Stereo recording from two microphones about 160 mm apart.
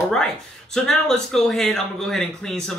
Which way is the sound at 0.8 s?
5° left (ahead or behind).